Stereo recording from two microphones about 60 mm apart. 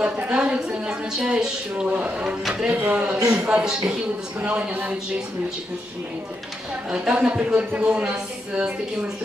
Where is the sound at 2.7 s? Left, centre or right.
Right.